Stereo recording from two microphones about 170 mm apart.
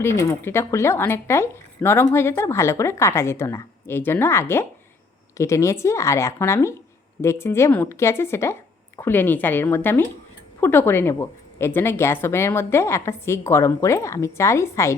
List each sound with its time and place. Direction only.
0.0 s speech: 15° left (ahead or behind)